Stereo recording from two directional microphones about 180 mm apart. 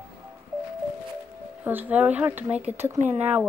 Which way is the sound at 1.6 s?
10° right (ahead or behind).